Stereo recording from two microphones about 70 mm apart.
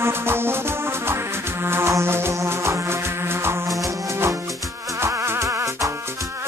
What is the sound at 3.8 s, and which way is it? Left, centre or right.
Music, right.